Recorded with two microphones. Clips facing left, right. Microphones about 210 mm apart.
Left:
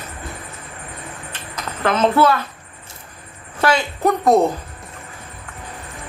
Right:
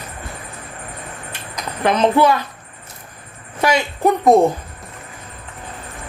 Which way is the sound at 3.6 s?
15° right (ahead or behind).